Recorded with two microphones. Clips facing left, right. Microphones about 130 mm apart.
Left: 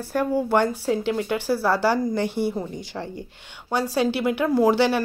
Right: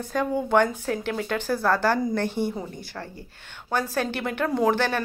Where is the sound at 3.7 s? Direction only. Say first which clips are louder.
Left 4 dB; 15° left (ahead or behind).